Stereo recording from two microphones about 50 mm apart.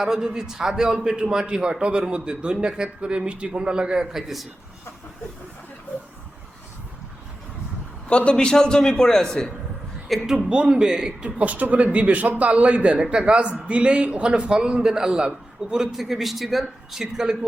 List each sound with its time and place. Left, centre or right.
0.0 s a man's voice: centre
8.0 s a man's voice: left; by 10.3 s centre
10.5 s a man's voice: centre